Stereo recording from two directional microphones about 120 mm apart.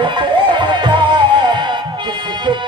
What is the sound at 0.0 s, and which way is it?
Music, 40° right (ahead or behind).